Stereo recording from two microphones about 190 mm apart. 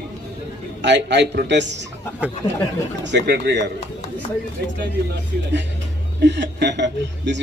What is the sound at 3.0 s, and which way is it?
Speech, 65° right (ahead or behind).